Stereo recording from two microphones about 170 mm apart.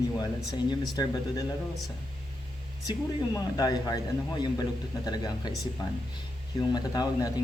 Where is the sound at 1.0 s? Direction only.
25° left (ahead or behind).